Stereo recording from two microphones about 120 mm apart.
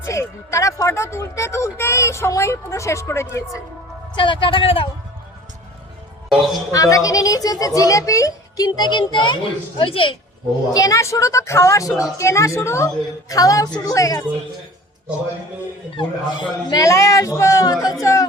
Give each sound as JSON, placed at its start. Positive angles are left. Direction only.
{"t": 0.0, "sound": "speech", "side_deg": 25}
{"t": 4.1, "sound": "speech", "side_deg": 45}
{"t": 6.7, "sound": "a child's voice", "side_deg": 30}
{"t": 10.7, "sound": "speech", "side_deg": 30}
{"t": 16.0, "sound": "speech", "side_deg": 40}